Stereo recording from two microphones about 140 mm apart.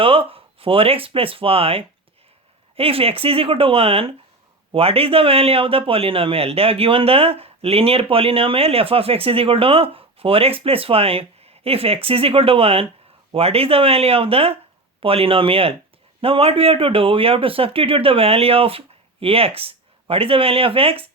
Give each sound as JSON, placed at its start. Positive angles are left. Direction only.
{"t": 0.0, "sound": "a man's voice", "side_deg": -40}